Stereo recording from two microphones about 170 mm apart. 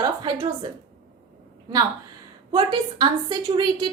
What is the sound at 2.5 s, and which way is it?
A woman's voice, 30° right (ahead or behind).